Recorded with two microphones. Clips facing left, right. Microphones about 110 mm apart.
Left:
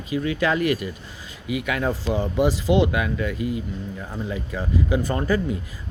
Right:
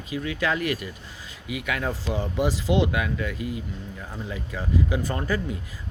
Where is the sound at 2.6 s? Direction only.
55° left (ahead or behind).